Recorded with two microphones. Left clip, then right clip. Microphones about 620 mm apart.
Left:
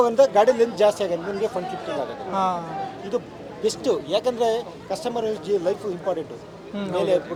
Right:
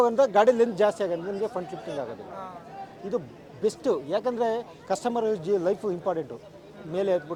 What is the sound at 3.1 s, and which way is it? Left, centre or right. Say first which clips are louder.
A man's voice: left 2 dB; right.